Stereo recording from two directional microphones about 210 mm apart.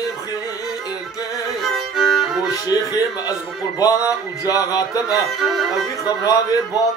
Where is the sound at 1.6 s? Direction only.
Centre (ahead or behind).